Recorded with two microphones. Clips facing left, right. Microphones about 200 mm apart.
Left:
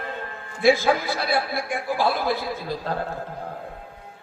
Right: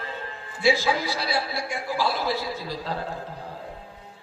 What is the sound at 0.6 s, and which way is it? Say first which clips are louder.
A man's voice: left 4 dB; 55° left (ahead or behind).